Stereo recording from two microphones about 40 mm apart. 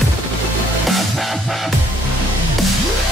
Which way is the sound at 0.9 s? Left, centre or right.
Centre.